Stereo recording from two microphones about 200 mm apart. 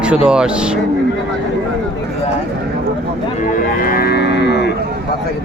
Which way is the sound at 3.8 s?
50° left (ahead or behind).